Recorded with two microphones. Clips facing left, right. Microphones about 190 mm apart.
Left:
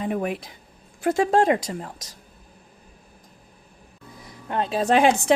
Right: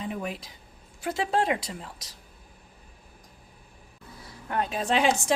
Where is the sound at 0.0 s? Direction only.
55° left (ahead or behind).